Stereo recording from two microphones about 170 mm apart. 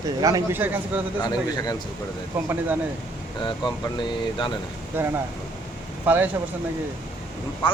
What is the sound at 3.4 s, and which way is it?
A man's voice, 25° left (ahead or behind).